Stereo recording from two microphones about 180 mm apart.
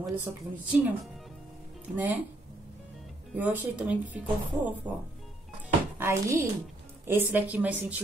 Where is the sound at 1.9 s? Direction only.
10° right (ahead or behind).